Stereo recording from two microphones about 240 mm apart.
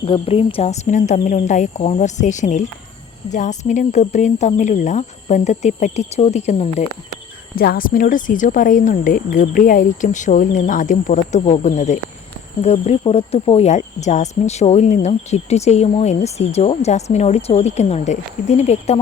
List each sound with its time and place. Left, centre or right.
0.0 s speech: left
7.5 s speech: left